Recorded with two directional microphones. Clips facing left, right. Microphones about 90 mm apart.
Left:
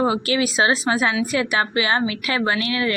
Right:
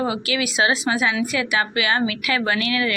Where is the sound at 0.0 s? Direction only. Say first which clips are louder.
Left 3 dB; 30° left (ahead or behind).